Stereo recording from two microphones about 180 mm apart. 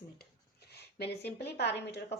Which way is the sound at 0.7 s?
65° left (ahead or behind).